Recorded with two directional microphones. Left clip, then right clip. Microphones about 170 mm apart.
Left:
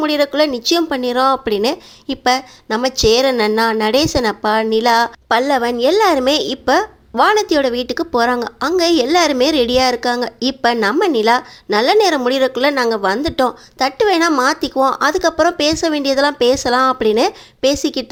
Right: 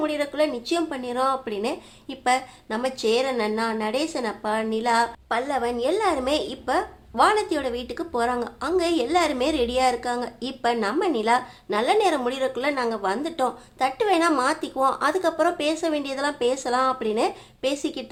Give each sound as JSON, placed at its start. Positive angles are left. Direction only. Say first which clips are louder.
{"t": 0.0, "sound": "speech", "louder": "left 9 dB", "side_deg": 40}